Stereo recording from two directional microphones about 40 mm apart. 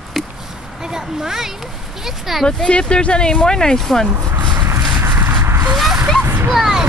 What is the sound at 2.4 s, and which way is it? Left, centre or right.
Speech, left.